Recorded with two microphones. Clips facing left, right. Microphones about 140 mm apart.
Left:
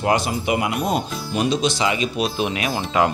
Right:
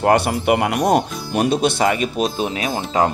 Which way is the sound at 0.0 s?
60° right (ahead or behind).